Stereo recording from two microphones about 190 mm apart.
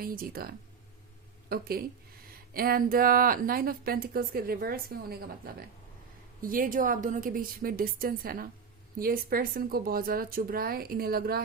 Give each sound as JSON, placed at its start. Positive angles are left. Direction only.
{"t": 0.0, "sound": "a woman's voice", "side_deg": -50}
{"t": 6.4, "sound": "a woman's voice", "side_deg": -45}